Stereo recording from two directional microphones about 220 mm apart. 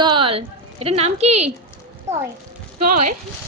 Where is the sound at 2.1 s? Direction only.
10° right (ahead or behind).